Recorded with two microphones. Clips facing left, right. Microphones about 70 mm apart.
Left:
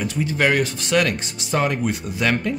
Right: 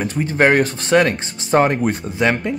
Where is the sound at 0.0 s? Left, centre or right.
Right.